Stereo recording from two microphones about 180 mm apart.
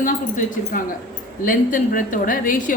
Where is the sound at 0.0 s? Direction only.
50° left (ahead or behind).